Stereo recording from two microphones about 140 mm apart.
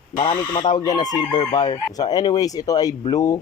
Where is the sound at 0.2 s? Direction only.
40° left (ahead or behind).